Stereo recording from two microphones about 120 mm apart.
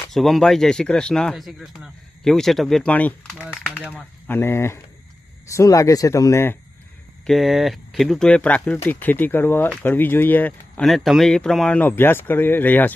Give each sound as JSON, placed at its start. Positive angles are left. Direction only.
{"t": 0.1, "sound": "speech", "side_deg": 0}
{"t": 2.9, "sound": "speech", "side_deg": 15}
{"t": 7.3, "sound": "speech", "side_deg": 0}
{"t": 10.8, "sound": "speech", "side_deg": 0}